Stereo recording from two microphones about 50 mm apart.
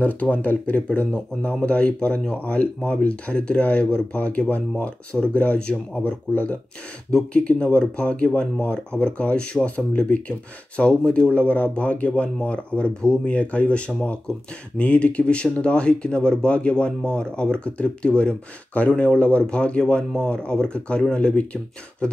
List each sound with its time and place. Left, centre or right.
0.0 s speech: left